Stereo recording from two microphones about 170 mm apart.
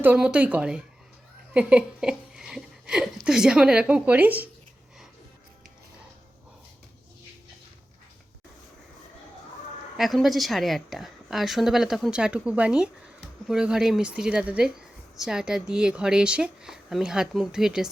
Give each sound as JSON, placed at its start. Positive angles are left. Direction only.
{"t": 0.0, "sound": "a woman's voice", "side_deg": -10}
{"t": 10.0, "sound": "a woman's voice", "side_deg": 0}